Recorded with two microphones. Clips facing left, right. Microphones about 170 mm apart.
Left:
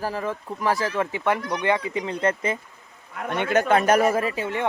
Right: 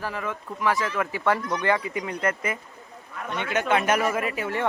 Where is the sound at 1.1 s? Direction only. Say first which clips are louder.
Even; 20° left (ahead or behind).